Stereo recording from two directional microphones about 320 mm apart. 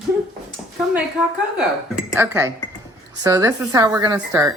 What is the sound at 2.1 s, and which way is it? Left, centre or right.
Speech, centre.